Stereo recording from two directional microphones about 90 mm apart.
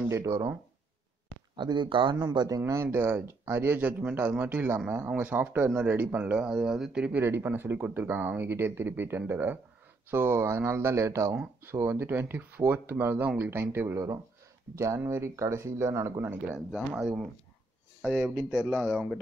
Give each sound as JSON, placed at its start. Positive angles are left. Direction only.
{"t": 0.2, "sound": "speech", "side_deg": -30}
{"t": 1.6, "sound": "speech", "side_deg": -60}
{"t": 2.6, "sound": "speech", "side_deg": -30}
{"t": 7.2, "sound": "speech", "side_deg": -25}
{"t": 16.4, "sound": "speech", "side_deg": -10}